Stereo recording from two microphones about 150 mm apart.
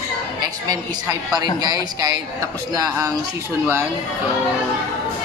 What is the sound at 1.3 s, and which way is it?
Speech, 25° right (ahead or behind).